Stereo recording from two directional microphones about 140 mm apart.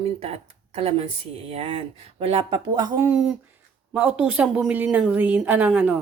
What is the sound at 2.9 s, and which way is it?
Speech, 15° right (ahead or behind).